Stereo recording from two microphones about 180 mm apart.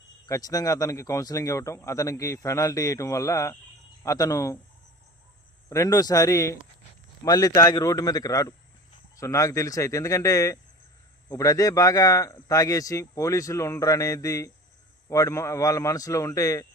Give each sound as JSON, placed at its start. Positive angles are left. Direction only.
{"t": 0.3, "sound": "a man's voice", "side_deg": 20}
{"t": 5.6, "sound": "a man's voice", "side_deg": 15}